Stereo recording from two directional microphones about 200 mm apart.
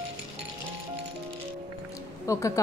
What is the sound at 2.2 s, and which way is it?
Speech, 15° left (ahead or behind).